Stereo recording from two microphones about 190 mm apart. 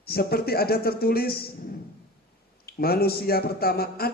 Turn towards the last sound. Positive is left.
turn(degrees=55)  # may be behind; listen again after turning